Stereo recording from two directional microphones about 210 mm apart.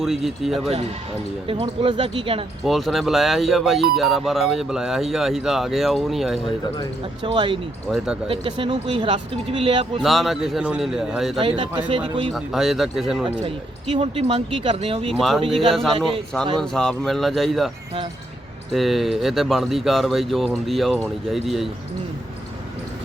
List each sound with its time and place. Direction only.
0.0 s speech: centre (ahead or behind)
1.5 s speech: 25° right (ahead or behind)
2.6 s speech: centre (ahead or behind)
7.2 s speech: 25° right (ahead or behind)
7.9 s speech: 5° right (ahead or behind)
8.3 s speech: 25° right (ahead or behind)
10.0 s speech: centre (ahead or behind)
11.3 s speech: 25° right (ahead or behind)
12.3 s speech: centre (ahead or behind)
13.2 s speech: 25° right (ahead or behind)
15.7 s speech: centre (ahead or behind)
16.0 s speech: 25° right (ahead or behind)
16.6 s speech: 5° left (ahead or behind)
18.7 s speech: centre (ahead or behind)